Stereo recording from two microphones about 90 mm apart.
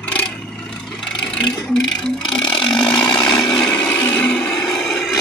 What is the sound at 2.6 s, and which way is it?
Chainsaw, 55° left (ahead or behind).